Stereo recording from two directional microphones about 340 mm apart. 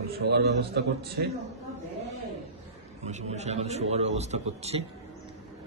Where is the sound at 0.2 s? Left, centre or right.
Right.